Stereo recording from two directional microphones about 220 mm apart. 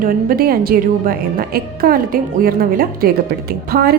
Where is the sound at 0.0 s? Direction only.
40° right (ahead or behind).